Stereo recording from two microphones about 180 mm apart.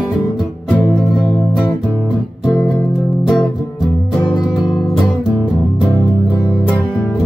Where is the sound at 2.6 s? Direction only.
10° left (ahead or behind).